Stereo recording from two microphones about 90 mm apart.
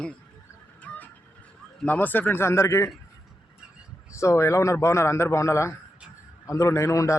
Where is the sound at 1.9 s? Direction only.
20° left (ahead or behind).